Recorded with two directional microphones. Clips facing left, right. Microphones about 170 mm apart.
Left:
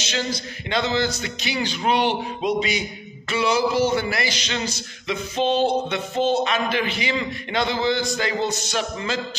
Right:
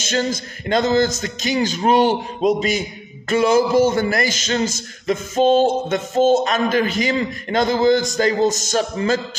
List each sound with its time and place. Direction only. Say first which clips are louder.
0.0 s a man's voice: right 5 dB; 45° right (ahead or behind)